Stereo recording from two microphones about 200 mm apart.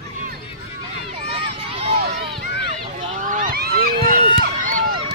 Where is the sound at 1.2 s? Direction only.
25° right (ahead or behind).